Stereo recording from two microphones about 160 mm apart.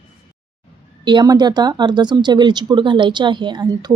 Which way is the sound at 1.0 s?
25° right (ahead or behind).